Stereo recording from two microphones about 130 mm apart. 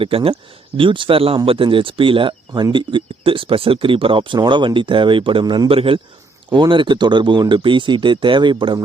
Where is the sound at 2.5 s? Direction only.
25° right (ahead or behind).